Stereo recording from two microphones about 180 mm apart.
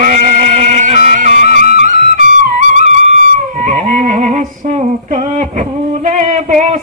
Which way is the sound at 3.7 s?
45° right (ahead or behind).